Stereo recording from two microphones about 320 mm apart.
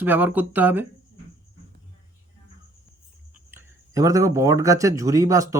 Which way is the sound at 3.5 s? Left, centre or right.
Centre.